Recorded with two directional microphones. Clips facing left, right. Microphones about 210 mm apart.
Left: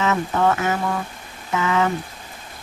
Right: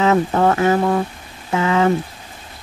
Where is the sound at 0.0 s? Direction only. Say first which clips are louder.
Right 5 dB; 35° right (ahead or behind).